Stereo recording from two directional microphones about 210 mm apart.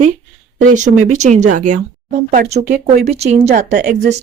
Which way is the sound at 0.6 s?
35° right (ahead or behind).